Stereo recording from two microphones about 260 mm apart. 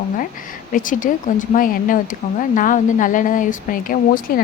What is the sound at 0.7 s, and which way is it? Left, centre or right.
Speech, left.